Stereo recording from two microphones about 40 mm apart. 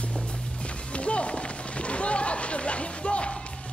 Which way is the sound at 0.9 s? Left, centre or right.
Left.